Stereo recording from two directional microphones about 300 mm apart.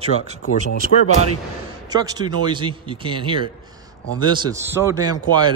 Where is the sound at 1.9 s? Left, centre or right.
Centre.